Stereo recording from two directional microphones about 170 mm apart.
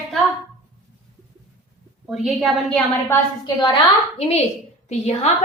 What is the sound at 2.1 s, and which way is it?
Speech, centre (ahead or behind).